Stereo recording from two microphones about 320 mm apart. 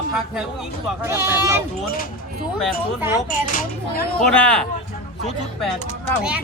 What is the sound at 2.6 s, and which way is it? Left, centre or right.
Speech, centre.